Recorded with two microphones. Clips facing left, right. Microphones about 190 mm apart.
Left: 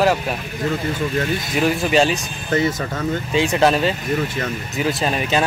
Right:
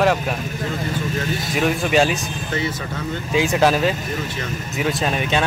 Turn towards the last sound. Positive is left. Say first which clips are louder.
# left 1 dB
turn(degrees=0)  # may be behind; listen again after turning